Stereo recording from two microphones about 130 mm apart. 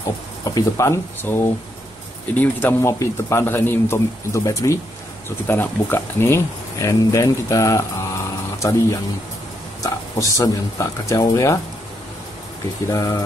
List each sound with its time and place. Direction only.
0.6 s speech: 25° left (ahead or behind)
9.8 s speech: 25° left (ahead or behind)
12.8 s speech: 25° left (ahead or behind)